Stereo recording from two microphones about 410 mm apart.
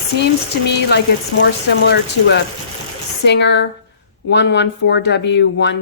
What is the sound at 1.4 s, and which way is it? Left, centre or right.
Speech, left.